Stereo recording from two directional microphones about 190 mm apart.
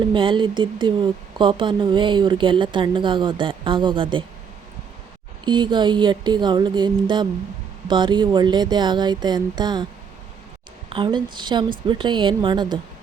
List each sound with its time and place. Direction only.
0.1 s speech: 25° right (ahead or behind)
5.5 s speech: 25° right (ahead or behind)
10.8 s speech: 25° right (ahead or behind)